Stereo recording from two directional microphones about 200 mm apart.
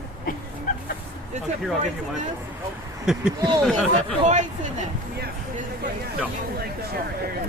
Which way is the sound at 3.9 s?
35° right (ahead or behind).